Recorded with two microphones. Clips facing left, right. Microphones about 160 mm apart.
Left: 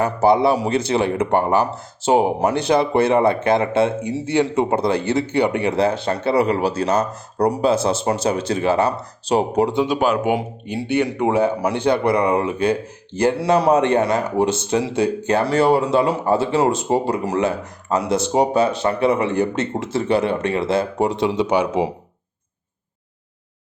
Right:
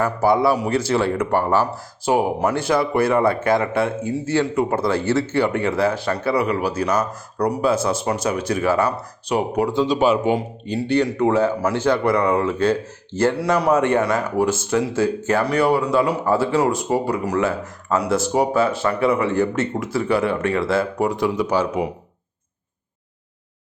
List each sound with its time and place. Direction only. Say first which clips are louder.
0.0 s speech: left 2 dB; 25° left (ahead or behind)
9.8 s speech: right 1 dB; 5° left (ahead or behind); by 21.9 s 25° left (ahead or behind)